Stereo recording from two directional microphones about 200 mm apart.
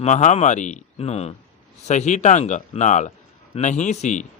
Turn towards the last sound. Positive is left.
turn(degrees=35)  # may be behind; listen again after turning